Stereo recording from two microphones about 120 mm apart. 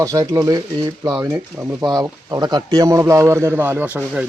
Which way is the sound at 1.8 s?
30° right (ahead or behind).